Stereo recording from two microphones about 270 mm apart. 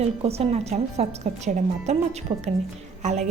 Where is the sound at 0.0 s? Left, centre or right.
Right.